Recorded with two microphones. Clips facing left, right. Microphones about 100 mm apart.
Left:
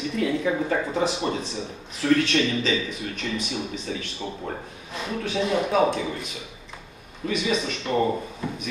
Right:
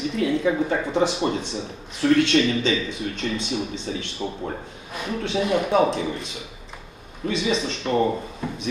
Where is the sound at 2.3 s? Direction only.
30° right (ahead or behind).